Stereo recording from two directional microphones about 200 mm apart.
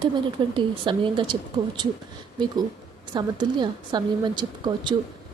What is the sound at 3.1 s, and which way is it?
A woman's voice, 20° right (ahead or behind).